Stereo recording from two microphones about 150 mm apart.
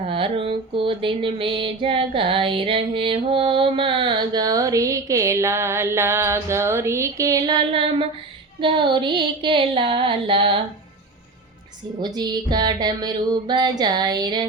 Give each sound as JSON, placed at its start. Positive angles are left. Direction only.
{"t": 0.1, "sound": "music", "side_deg": -35}
{"t": 12.0, "sound": "music", "side_deg": -30}